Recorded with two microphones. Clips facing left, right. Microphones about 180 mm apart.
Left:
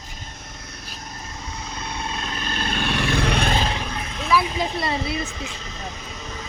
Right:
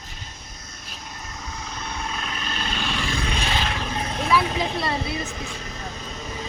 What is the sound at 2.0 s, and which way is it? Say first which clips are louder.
Vehicle: left 2 dB; 30° left (ahead or behind).